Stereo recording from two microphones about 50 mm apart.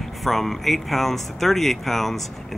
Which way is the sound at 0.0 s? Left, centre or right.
Centre.